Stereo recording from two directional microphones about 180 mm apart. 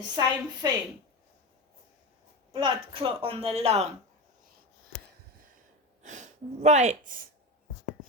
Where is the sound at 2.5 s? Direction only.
30° right (ahead or behind).